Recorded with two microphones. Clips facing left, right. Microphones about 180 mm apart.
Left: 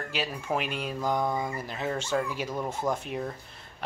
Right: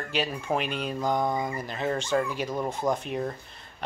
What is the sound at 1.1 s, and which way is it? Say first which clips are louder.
Mantra: right 1 dB; 15° right (ahead or behind).